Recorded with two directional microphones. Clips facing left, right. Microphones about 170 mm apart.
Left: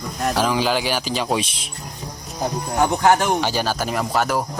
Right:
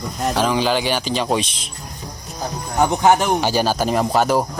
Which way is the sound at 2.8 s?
15° right (ahead or behind).